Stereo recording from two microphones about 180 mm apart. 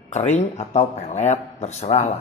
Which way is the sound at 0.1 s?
40° left (ahead or behind).